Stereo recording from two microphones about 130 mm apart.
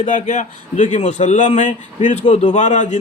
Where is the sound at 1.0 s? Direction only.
60° left (ahead or behind).